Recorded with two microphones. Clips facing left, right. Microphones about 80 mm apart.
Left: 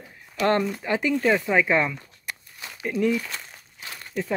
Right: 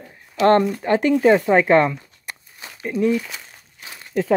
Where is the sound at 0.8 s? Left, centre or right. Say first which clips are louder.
Right 7 dB; right.